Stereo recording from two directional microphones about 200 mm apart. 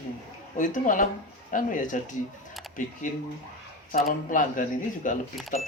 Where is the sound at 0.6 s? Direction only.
40° left (ahead or behind).